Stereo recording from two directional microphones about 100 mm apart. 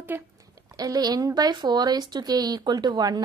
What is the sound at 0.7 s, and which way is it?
A woman's voice, 40° right (ahead or behind).